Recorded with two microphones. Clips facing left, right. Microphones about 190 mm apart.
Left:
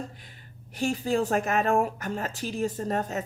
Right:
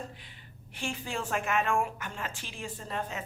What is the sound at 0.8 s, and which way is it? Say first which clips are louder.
A woman's voice: left 10 dB; 40° left (ahead or behind).